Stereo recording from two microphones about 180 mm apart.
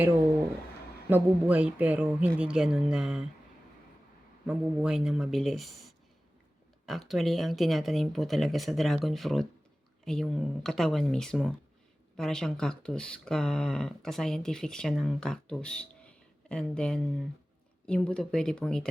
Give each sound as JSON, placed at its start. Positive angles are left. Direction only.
{"t": 1.1, "sound": "speech", "side_deg": -10}
{"t": 4.4, "sound": "speech", "side_deg": -5}